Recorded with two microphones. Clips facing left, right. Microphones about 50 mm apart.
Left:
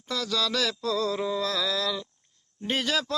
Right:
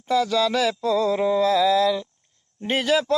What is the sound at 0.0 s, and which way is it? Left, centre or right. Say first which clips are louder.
Speech: right 9 dB; centre.